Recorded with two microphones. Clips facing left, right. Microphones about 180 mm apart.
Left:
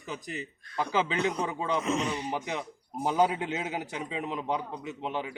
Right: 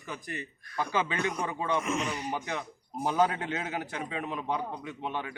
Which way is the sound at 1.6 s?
20° left (ahead or behind).